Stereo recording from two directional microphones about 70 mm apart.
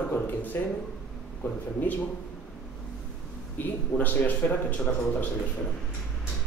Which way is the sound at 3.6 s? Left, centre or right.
Left.